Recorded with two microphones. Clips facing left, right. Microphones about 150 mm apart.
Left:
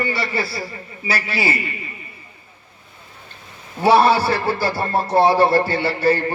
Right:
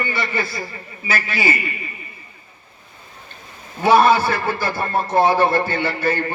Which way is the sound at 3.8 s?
35° left (ahead or behind).